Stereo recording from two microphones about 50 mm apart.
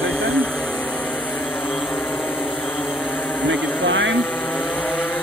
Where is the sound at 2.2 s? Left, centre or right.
Left.